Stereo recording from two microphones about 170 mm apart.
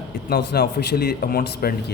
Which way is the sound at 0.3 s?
65° left (ahead or behind).